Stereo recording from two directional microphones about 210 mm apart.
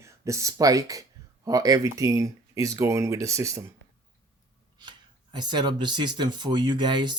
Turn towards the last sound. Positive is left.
turn(degrees=-20)  # may be behind; listen again after turning